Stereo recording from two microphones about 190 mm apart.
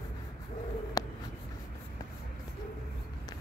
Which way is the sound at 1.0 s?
20° left (ahead or behind).